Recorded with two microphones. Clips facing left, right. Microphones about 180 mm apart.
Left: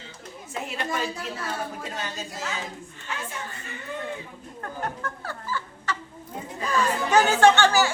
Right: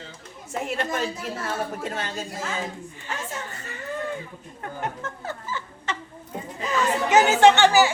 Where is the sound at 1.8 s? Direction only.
55° right (ahead or behind).